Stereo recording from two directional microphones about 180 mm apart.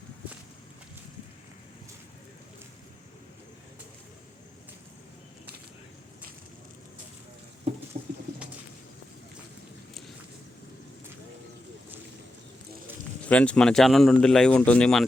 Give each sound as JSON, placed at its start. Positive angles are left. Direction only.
{"t": 7.9, "sound": "bird", "side_deg": -40}
{"t": 13.2, "sound": "speech", "side_deg": 5}